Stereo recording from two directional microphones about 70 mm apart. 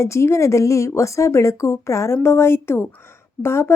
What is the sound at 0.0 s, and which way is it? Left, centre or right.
A woman's voice, left.